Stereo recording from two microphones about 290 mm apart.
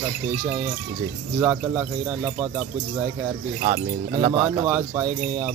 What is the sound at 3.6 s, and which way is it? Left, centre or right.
Speech, right.